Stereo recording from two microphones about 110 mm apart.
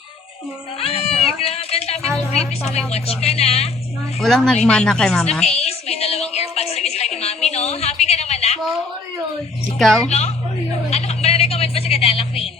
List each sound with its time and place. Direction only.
0.8 s cat: 65° left (ahead or behind)
2.3 s a woman's voice: 80° left
4.2 s speech: 5° left (ahead or behind)
5.5 s a sound: 75° left (ahead or behind)
9.7 s speech: 5° left (ahead or behind)
10.1 s a woman's voice: 75° left (ahead or behind)
10.9 s a sound: 70° left (ahead or behind)